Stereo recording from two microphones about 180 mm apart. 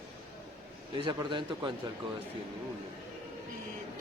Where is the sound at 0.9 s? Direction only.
25° right (ahead or behind).